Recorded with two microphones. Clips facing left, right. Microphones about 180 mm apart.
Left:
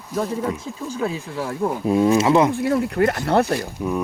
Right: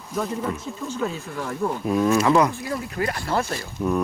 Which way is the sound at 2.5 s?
60° left (ahead or behind).